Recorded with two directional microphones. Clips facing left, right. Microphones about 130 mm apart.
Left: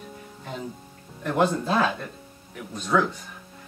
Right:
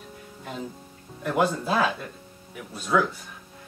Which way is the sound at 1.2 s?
5° right (ahead or behind).